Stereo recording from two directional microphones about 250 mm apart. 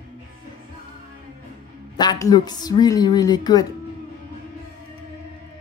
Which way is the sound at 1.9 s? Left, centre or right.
Centre.